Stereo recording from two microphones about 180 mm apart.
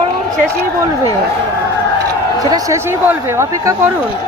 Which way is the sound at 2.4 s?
20° right (ahead or behind).